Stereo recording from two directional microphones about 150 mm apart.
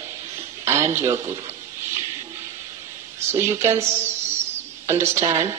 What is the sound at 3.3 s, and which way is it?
A woman's voice, 15° right (ahead or behind).